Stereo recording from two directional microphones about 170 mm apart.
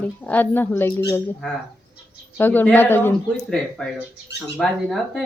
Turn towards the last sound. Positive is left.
turn(degrees=0)  # may be behind; listen again after turning